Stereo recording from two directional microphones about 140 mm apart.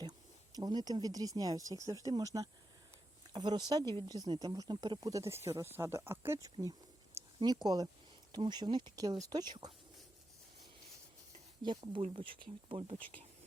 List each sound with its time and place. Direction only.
0.5 s speech: 30° right (ahead or behind)
11.6 s speech: 35° right (ahead or behind)